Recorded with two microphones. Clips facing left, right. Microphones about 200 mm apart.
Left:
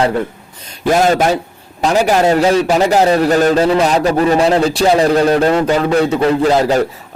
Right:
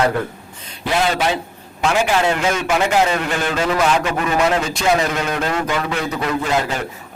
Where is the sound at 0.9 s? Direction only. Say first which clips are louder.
Left 7 dB; 45° left (ahead or behind).